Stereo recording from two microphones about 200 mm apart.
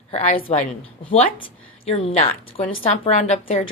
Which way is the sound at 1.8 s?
30° left (ahead or behind).